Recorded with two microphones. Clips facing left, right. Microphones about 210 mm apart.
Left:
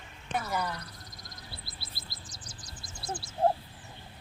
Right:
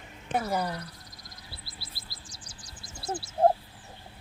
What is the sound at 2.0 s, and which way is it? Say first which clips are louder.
Bird: left 1 dB; 10° right (ahead or behind).